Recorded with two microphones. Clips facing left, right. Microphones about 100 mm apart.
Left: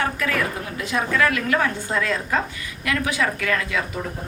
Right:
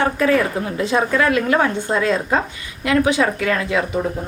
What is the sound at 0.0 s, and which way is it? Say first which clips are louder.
A woman's voice: right 7 dB; 30° right (ahead or behind).